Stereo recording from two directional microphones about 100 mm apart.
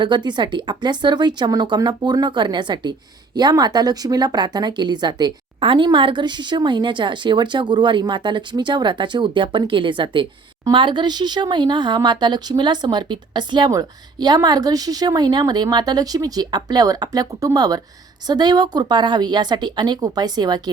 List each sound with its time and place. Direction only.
0.0 s a woman's voice: 50° right (ahead or behind)